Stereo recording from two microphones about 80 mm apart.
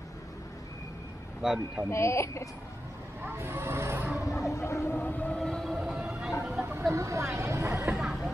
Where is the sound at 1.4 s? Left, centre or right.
Centre.